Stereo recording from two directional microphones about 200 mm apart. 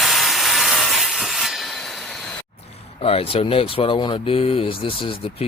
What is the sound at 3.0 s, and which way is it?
Speech, 30° left (ahead or behind).